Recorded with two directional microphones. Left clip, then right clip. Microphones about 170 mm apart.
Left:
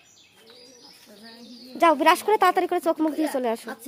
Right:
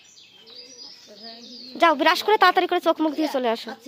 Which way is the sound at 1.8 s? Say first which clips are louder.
Even; centre (ahead or behind).